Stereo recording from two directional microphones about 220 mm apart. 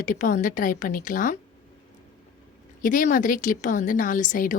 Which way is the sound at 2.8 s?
35° left (ahead or behind).